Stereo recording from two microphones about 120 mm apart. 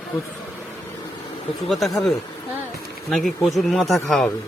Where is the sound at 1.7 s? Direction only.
Centre (ahead or behind).